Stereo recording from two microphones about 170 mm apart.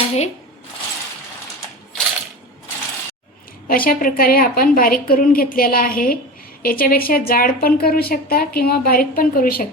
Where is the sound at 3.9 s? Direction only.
60° left (ahead or behind).